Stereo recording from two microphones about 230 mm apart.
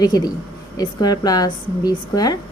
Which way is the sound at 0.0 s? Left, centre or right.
Centre.